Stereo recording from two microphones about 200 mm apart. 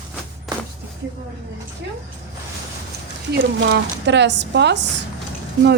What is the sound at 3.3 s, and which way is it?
A woman's voice, 60° right (ahead or behind).